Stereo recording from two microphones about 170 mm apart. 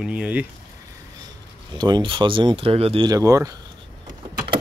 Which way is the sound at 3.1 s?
20° right (ahead or behind).